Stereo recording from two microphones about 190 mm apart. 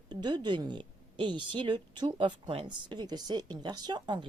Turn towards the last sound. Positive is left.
turn(degrees=-25)  # may be behind; listen again after turning